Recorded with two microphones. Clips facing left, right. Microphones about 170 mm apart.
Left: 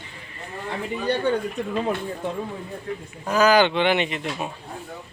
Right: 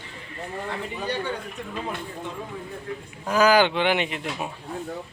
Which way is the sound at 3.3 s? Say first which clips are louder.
Left 1 dB; 10° right (ahead or behind).